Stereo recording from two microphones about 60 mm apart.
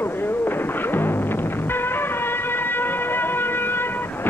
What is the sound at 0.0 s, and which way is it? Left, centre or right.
Music, left.